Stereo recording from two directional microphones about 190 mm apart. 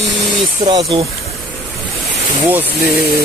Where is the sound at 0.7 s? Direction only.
25° right (ahead or behind).